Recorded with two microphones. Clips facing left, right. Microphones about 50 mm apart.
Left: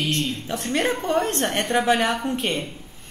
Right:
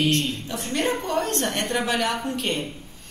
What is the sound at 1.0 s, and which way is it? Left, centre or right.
A woman's voice, left.